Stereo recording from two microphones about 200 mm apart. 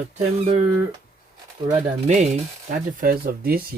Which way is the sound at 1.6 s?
35° right (ahead or behind).